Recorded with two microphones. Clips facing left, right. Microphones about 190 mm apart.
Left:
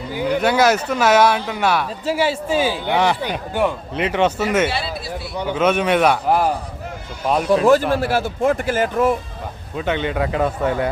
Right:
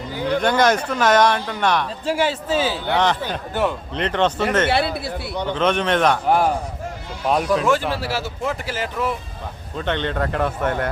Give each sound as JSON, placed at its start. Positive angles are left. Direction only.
{"t": 0.1, "sound": "speech", "side_deg": 10}
{"t": 4.7, "sound": "speech", "side_deg": -60}
{"t": 5.4, "sound": "speech", "side_deg": 10}
{"t": 7.7, "sound": "speech", "side_deg": 45}
{"t": 9.7, "sound": "speech", "side_deg": 5}